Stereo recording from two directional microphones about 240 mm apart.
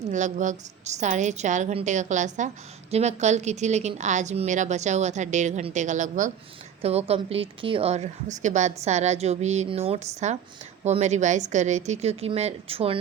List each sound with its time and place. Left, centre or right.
0.1 s a woman's voice: right